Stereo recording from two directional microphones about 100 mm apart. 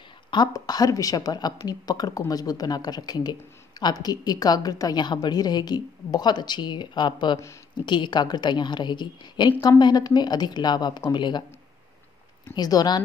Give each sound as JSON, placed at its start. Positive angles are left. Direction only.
{"t": 0.3, "sound": "a woman's voice", "side_deg": 45}
{"t": 12.5, "sound": "a woman's voice", "side_deg": 40}